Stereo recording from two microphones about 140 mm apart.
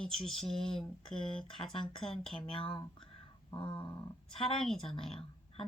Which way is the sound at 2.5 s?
40° left (ahead or behind).